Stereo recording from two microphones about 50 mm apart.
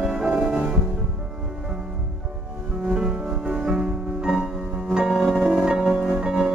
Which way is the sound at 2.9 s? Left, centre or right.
Centre.